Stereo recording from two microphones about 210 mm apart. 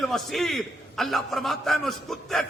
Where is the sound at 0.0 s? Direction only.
Centre (ahead or behind).